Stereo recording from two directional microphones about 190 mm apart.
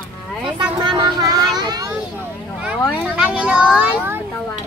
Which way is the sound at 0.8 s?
25° right (ahead or behind).